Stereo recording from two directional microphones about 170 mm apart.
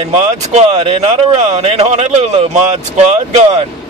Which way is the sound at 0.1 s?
40° right (ahead or behind).